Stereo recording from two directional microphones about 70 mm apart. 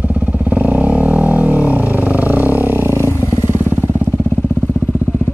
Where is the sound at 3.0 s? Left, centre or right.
Left.